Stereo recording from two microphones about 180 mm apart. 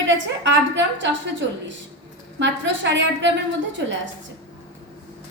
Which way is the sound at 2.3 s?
85° right.